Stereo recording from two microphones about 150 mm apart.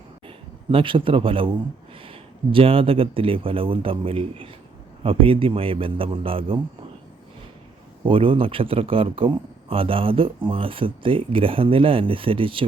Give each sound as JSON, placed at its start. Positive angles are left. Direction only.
{"t": 0.3, "sound": "a man's voice", "side_deg": -35}
{"t": 8.0, "sound": "speech", "side_deg": -35}